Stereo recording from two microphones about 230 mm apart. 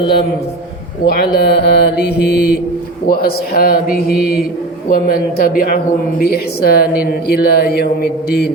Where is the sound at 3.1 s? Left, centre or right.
Left.